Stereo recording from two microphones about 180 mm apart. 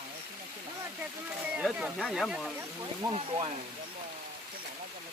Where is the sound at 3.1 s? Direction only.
30° right (ahead or behind).